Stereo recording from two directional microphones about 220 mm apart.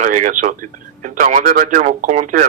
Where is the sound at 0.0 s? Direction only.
35° right (ahead or behind).